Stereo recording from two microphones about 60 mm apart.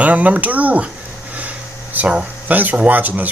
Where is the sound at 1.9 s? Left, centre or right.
Right.